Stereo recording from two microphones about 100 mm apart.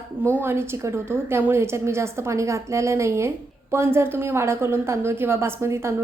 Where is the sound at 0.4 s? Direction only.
25° right (ahead or behind).